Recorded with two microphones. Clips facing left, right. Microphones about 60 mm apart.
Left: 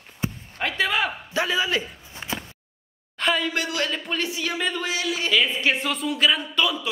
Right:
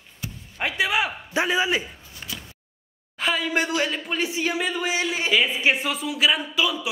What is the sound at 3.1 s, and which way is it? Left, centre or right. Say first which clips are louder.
Speech: left 1 dB; centre.